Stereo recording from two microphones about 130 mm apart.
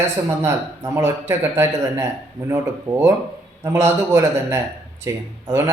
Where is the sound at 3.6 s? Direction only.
20° right (ahead or behind).